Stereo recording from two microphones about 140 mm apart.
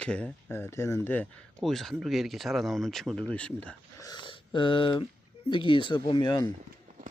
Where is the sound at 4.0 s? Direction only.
30° left (ahead or behind).